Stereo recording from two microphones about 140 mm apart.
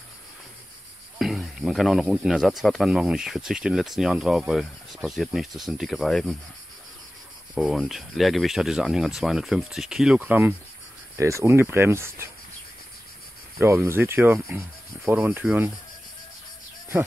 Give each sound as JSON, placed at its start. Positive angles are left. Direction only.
{"t": 1.1, "sound": "speech", "side_deg": 0}
{"t": 7.5, "sound": "speech", "side_deg": -5}
{"t": 11.1, "sound": "speech", "side_deg": -20}
{"t": 13.6, "sound": "speech", "side_deg": -20}